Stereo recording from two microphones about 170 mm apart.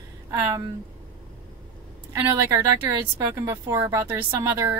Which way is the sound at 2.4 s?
15° right (ahead or behind).